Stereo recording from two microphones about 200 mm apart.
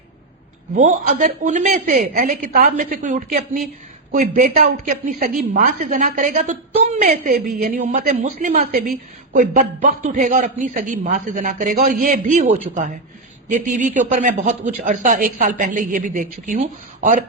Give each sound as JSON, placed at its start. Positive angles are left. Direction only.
{"t": 0.7, "sound": "a man's voice", "side_deg": -40}